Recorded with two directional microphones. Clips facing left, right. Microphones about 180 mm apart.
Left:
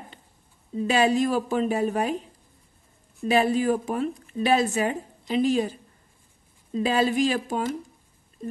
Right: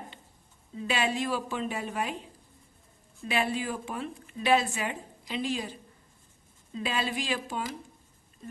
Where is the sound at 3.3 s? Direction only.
40° left (ahead or behind).